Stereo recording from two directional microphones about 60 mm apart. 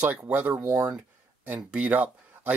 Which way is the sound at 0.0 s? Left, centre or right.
Right.